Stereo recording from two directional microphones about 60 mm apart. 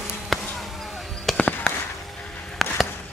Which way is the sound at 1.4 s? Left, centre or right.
Left.